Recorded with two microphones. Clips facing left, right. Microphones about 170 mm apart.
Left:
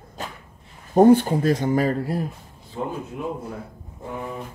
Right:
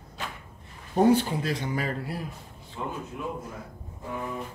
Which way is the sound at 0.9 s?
45° left (ahead or behind).